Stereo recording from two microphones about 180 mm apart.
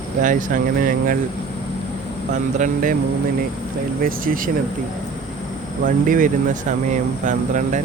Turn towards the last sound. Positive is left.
turn(degrees=-45)  # may be behind; listen again after turning